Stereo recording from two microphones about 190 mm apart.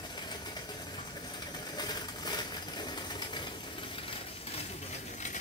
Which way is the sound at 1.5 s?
20° left (ahead or behind).